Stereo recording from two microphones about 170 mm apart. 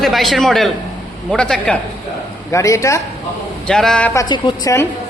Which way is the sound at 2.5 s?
20° left (ahead or behind).